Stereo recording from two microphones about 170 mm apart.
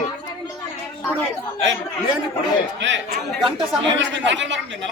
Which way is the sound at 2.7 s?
90° right.